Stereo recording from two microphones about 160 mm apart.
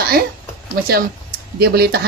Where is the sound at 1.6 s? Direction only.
80° right.